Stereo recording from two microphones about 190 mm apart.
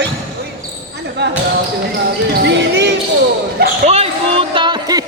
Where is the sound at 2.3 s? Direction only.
60° right (ahead or behind).